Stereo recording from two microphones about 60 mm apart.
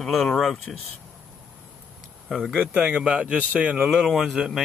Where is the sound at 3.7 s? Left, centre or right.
Centre.